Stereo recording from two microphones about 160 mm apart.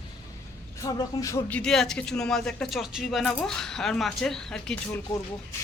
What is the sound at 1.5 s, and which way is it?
Speech, 5° left (ahead or behind).